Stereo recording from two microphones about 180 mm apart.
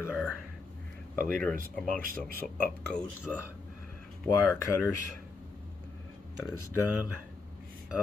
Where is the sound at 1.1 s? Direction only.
50° right (ahead or behind).